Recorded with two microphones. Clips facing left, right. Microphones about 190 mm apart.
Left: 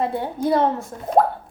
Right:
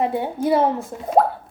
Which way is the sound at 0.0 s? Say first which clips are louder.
Right 1 dB; 15° right (ahead or behind).